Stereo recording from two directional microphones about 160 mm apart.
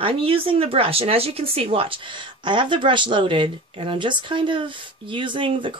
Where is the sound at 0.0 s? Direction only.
35° right (ahead or behind).